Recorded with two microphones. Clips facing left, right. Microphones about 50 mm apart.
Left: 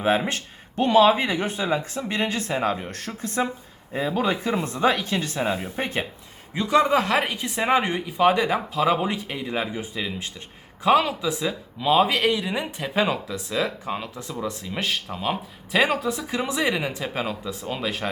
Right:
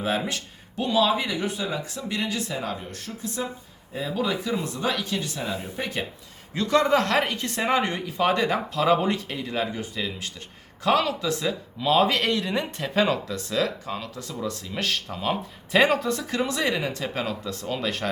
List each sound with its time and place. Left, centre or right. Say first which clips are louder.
0.0 s speech: left 4 dB; left
6.5 s speech: left 1 dB; centre